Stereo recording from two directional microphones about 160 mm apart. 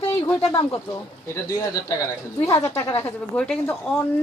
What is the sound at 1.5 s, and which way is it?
A woman's voice, 20° left (ahead or behind).